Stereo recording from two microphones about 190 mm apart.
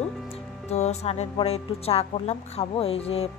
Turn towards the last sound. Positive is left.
turn(degrees=30)  # may be behind; listen again after turning